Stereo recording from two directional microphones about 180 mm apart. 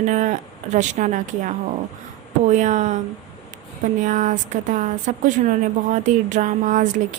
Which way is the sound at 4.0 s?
45° right (ahead or behind).